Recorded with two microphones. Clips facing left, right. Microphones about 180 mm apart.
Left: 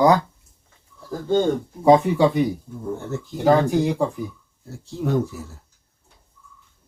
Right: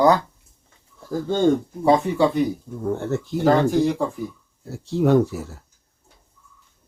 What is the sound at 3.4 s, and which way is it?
Speech, 15° left (ahead or behind).